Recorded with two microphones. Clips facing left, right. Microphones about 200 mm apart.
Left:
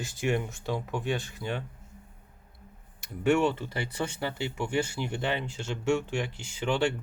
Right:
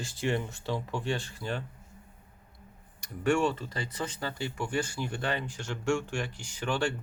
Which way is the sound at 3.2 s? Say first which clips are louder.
Left 2 dB; 20° left (ahead or behind).